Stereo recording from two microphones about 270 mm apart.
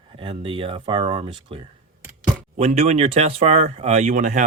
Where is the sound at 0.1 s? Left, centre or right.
Centre.